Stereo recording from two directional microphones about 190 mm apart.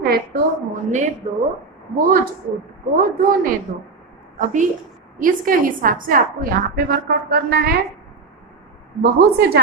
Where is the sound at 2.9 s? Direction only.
50° right (ahead or behind).